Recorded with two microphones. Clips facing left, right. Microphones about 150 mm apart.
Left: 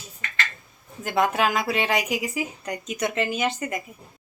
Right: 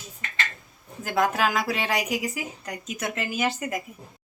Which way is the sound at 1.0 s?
Centre (ahead or behind).